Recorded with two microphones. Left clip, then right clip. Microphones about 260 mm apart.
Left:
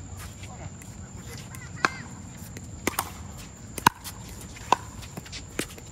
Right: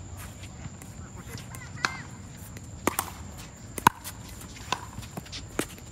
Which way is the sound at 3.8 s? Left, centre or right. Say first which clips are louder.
Even; centre.